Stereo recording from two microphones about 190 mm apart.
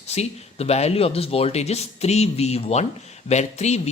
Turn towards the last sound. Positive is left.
turn(degrees=35)  # may be behind; listen again after turning